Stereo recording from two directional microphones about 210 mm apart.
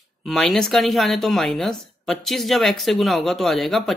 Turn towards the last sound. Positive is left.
turn(degrees=0)  # may be behind; listen again after turning